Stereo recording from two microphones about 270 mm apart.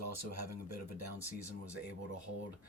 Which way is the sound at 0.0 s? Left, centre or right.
Right.